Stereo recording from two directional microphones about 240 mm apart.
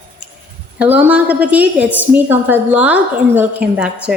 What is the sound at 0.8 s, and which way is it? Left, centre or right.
A woman's voice, centre.